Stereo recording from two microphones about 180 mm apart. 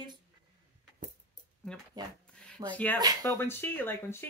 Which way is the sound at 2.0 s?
20° right (ahead or behind).